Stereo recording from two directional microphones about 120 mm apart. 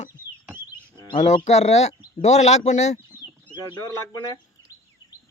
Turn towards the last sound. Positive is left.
turn(degrees=30)  # may be behind; listen again after turning